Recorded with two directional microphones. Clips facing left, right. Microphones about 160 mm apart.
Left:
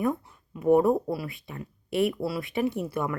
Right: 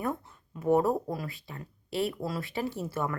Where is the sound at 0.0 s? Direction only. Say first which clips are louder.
Left 5 dB; 15° left (ahead or behind).